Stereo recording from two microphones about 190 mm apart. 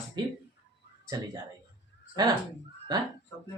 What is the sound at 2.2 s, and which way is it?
Speech, 20° right (ahead or behind).